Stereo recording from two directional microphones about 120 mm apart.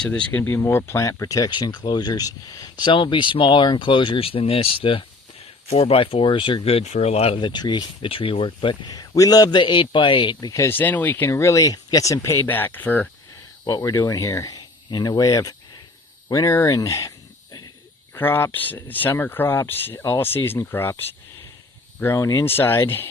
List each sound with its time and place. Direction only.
0.0 s speech: 10° left (ahead or behind); by 7.3 s 55° left (ahead or behind)
7.4 s speech: 40° left (ahead or behind)
10.5 s speech: 20° left (ahead or behind)
13.7 s speech: 30° left (ahead or behind)
18.1 s speech: 20° left (ahead or behind)